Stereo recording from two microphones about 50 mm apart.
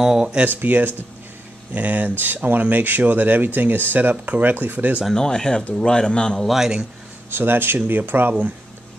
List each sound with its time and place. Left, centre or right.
0.0 s speech: centre
0.5 s speech: right
5.1 s a man's voice: centre
6.4 s a man's voice: centre
7.3 s speech: right